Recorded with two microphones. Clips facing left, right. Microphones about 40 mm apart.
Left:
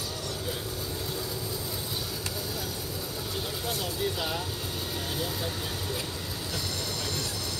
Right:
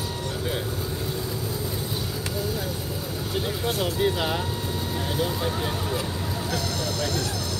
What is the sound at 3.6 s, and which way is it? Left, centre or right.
Vehicle, right.